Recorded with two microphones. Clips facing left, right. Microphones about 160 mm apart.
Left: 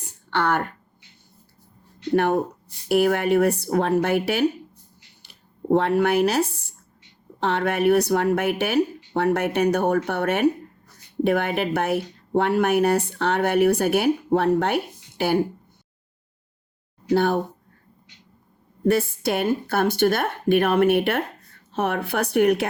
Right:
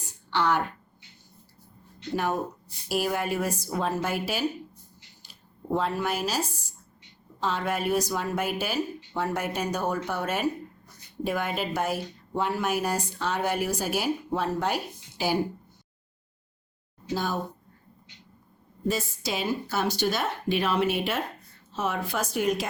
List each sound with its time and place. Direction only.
0.0 s a sound: 55° left (ahead or behind)
2.1 s speech: 60° left (ahead or behind)
17.1 s speech: 65° left (ahead or behind)
18.9 s speech: 60° left (ahead or behind)